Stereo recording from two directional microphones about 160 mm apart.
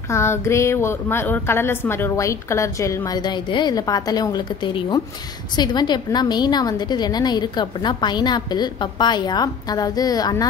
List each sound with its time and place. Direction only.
0.1 s a woman's voice: 15° left (ahead or behind)